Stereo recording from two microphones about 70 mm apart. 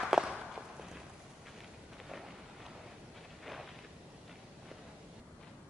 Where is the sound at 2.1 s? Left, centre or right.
Centre.